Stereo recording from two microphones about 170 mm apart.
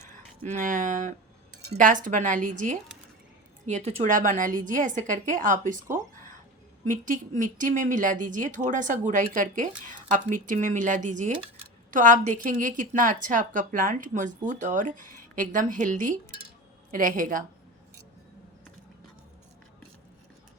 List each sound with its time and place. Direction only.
0.0 s speech: 45° right (ahead or behind)
3.7 s a woman's voice: 40° right (ahead or behind)